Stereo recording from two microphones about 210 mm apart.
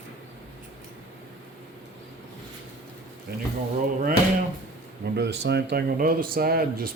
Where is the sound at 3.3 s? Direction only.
45° right (ahead or behind).